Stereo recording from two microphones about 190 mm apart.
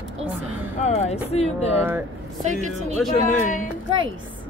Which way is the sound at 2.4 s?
40° right (ahead or behind).